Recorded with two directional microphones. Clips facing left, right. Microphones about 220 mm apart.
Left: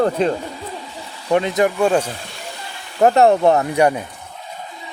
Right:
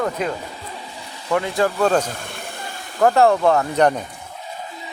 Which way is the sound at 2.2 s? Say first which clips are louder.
Right 1 dB; 55° right (ahead or behind).